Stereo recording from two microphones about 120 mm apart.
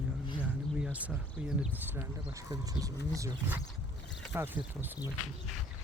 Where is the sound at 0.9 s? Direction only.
10° right (ahead or behind).